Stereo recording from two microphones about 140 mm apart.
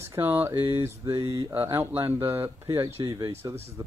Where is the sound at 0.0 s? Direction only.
15° right (ahead or behind).